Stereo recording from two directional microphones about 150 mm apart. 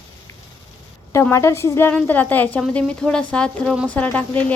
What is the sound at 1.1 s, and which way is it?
A woman's voice, 15° left (ahead or behind).